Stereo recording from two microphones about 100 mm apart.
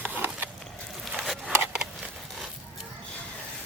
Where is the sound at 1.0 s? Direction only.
5° right (ahead or behind).